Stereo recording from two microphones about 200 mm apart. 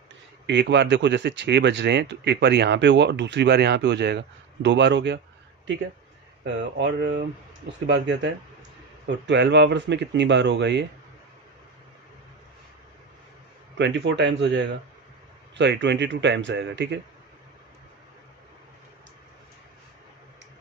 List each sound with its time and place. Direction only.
0.5 s speech: 60° right (ahead or behind)
6.4 s speech: 60° right (ahead or behind)
13.7 s speech: 65° right (ahead or behind)